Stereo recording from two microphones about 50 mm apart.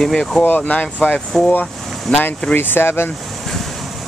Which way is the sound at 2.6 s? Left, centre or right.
Left.